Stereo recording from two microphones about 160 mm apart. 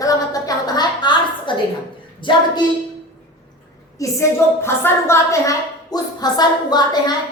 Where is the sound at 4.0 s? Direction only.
20° left (ahead or behind).